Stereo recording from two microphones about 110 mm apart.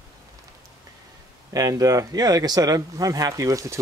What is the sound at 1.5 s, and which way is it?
Speech, 35° right (ahead or behind).